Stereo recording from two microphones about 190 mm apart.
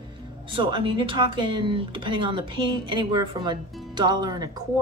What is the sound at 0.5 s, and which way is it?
Speech, 25° right (ahead or behind).